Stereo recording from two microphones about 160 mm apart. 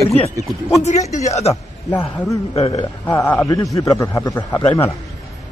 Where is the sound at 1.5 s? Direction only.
20° left (ahead or behind).